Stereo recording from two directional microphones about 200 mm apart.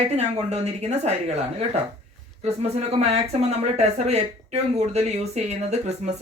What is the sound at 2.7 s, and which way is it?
Speech, 30° right (ahead or behind).